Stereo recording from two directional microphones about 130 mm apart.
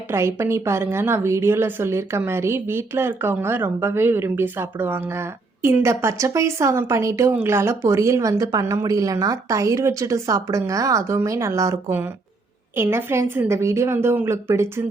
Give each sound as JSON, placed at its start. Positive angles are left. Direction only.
{"t": 0.1, "sound": "speech", "side_deg": -20}